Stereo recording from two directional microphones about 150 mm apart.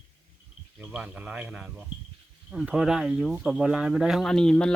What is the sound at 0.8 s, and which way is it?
A man's voice, 10° right (ahead or behind).